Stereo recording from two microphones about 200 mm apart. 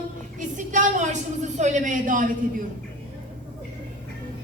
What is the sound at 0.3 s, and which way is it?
A woman's voice, 40° right (ahead or behind).